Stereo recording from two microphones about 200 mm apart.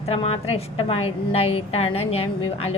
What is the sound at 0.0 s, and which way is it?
A woman's voice, 30° left (ahead or behind).